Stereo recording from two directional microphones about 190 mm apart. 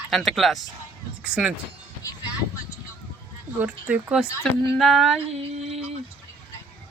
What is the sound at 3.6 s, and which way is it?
Speech, 10° right (ahead or behind).